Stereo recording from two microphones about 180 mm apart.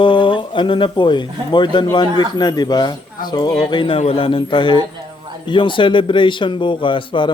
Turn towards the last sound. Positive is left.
turn(degrees=25)  # may be behind; listen again after turning